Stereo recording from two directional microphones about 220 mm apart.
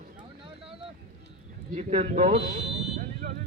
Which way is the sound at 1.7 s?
35° right (ahead or behind).